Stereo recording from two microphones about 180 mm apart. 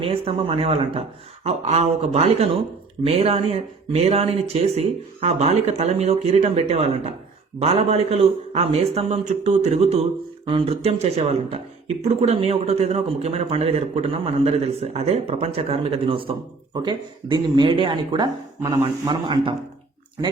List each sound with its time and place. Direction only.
0.0 s a man's voice: 30° right (ahead or behind)